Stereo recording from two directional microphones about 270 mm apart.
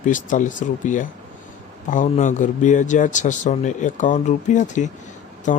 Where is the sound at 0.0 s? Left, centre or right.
Left.